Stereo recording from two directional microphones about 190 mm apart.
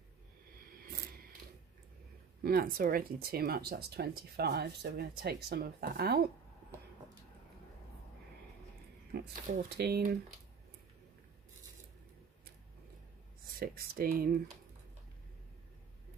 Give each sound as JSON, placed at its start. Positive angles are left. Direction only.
{"t": 0.7, "sound": "a sound", "side_deg": -50}
{"t": 2.4, "sound": "speech", "side_deg": -50}
{"t": 9.1, "sound": "speech", "side_deg": -55}
{"t": 13.5, "sound": "speech", "side_deg": -50}